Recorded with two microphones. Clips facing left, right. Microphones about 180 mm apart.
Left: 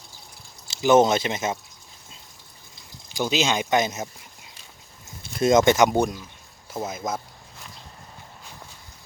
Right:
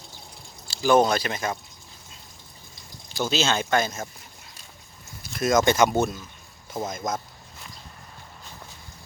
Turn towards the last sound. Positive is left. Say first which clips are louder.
# even
turn(degrees=10)  # may be behind; listen again after turning